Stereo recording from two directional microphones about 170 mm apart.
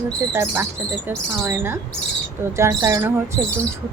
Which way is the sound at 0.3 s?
15° right (ahead or behind).